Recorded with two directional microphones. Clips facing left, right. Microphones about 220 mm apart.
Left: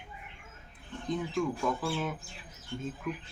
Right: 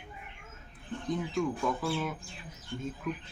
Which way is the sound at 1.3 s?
Centre (ahead or behind).